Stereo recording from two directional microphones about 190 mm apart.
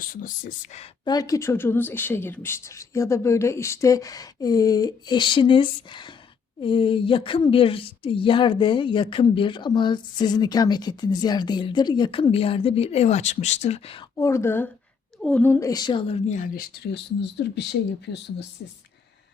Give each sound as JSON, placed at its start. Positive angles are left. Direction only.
{"t": 0.0, "sound": "speech", "side_deg": 45}
{"t": 1.0, "sound": "a woman's voice", "side_deg": 20}
{"t": 14.2, "sound": "speech", "side_deg": 15}